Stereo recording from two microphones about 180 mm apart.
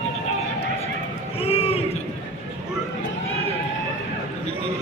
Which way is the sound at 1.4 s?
35° left (ahead or behind).